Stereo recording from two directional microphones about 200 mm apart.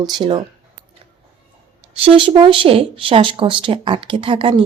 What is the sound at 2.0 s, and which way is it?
Speech, 25° right (ahead or behind).